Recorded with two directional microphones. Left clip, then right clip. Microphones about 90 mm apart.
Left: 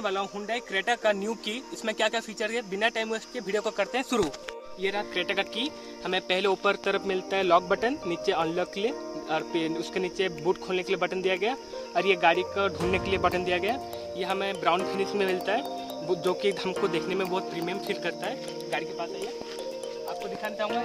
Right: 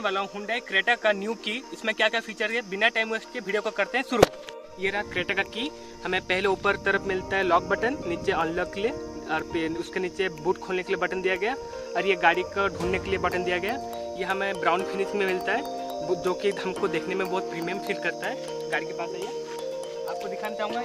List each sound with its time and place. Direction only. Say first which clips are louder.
0.0 s speech: right 2 dB; 15° left (ahead or behind)
1.2 s speech: right 2 dB; 5° left (ahead or behind); by 6.6 s 30° left (ahead or behind)
6.6 s speech: right 2 dB; 40° left (ahead or behind)
7.6 s speech: right 1 dB; 60° left (ahead or behind)
8.1 s speech: right 1 dB; 40° left (ahead or behind)
12.9 s speech: left 1 dB; 70° left (ahead or behind)
13.5 s speech: even; 45° left (ahead or behind)
14.1 s speech: right 1 dB; 25° left (ahead or behind)
14.4 s speech: right 1 dB; 15° left (ahead or behind)
14.9 s speech: right 1 dB; 30° left (ahead or behind)
16.8 s speech: right 1 dB; 20° left (ahead or behind)
17.2 s speech: right 1 dB; 5° left (ahead or behind)
18.7 s speech: right 2 dB; 20° left (ahead or behind)
20.4 s speech: left 1 dB; 10° left (ahead or behind)